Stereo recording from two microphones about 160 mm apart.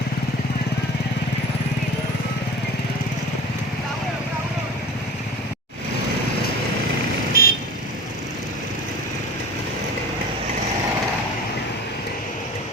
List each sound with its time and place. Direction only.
7.3 s vehicle: 70° left (ahead or behind)